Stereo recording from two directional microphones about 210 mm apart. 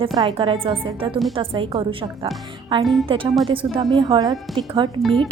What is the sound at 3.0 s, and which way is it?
A woman's voice, 25° right (ahead or behind).